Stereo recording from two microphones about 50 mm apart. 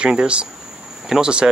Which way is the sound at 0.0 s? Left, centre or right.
Right.